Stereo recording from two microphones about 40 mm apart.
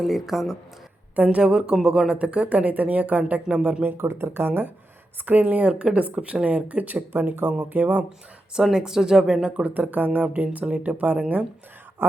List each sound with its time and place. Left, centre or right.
0.0 s speech: centre
1.1 s a woman's voice: right
1.4 s speech: right
2.1 s speech: right
3.8 s speech: right
5.2 s speech: right
8.5 s speech: centre
9.6 s speech: right
10.2 s speech: right